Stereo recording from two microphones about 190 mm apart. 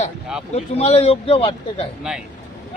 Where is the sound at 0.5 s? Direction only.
35° left (ahead or behind).